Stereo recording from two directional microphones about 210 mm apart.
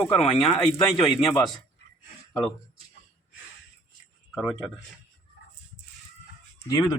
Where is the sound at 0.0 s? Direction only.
Centre (ahead or behind).